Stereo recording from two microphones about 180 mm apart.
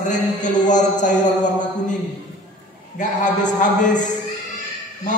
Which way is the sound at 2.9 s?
45° left (ahead or behind).